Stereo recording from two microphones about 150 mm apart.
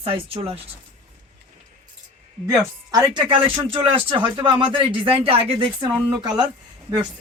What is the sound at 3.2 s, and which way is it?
Speech, 35° right (ahead or behind).